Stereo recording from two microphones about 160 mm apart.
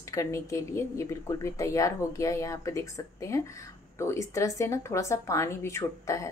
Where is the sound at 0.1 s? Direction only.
20° left (ahead or behind).